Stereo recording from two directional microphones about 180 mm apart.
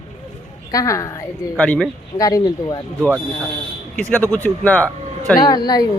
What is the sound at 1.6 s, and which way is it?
Speech, 5° left (ahead or behind).